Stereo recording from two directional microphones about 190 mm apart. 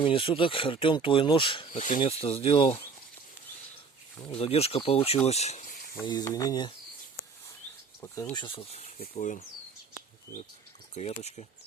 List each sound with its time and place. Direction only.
0.0 s speech: 25° left (ahead or behind)
1.7 s speech: 40° left (ahead or behind)
2.0 s speech: 30° left (ahead or behind)
4.2 s speech: 30° left (ahead or behind)
6.0 s speech: 20° left (ahead or behind)
8.0 s speech: 15° left (ahead or behind); by 8.9 s 30° left (ahead or behind)
9.1 s speech: 40° left (ahead or behind)
10.9 s speech: 35° left (ahead or behind)